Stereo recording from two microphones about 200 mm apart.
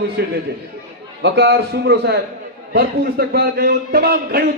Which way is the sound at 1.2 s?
55° right (ahead or behind).